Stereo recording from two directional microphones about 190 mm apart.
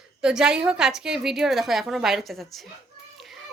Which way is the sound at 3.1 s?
Centre (ahead or behind).